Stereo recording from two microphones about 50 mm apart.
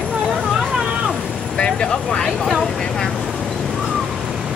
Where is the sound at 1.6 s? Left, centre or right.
Centre.